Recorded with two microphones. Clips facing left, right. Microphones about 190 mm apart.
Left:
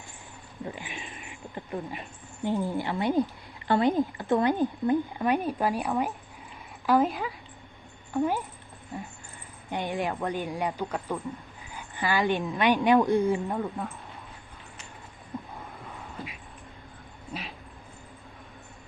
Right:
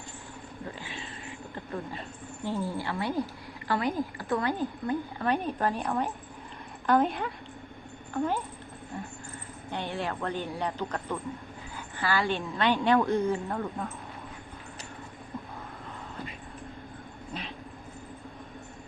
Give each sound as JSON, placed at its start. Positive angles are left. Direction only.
{"t": 0.6, "sound": "a woman's voice", "side_deg": 15}
{"t": 17.3, "sound": "dog", "side_deg": 10}